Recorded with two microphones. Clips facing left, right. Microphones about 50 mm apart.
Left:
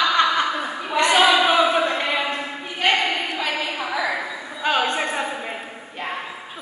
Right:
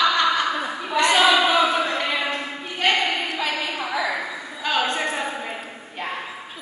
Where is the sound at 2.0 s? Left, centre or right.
Centre.